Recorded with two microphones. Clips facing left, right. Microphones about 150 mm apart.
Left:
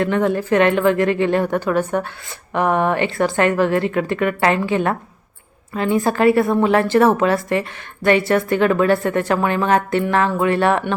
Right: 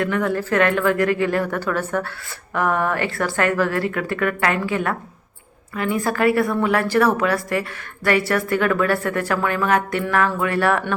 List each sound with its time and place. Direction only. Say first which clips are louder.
0.0 s a woman's voice: left 3 dB; 25° left (ahead or behind)